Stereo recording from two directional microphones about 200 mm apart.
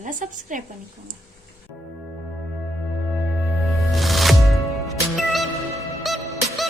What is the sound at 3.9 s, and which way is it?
Music, centre (ahead or behind).